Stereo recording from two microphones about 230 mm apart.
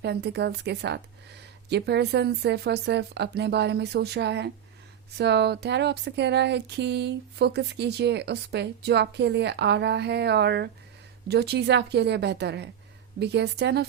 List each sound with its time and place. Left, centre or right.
0.0 s speech: right